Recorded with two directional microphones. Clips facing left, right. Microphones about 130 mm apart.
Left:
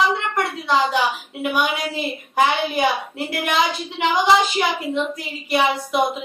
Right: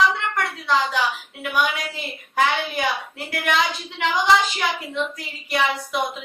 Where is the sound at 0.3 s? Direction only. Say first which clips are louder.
Left 2 dB; 20° left (ahead or behind).